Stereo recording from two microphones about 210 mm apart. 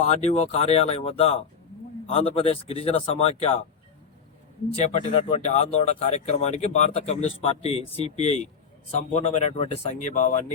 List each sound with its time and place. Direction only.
0.0 s speech: 30° left (ahead or behind)
2.4 s speech: 30° left (ahead or behind)
4.8 s speech: 35° left (ahead or behind)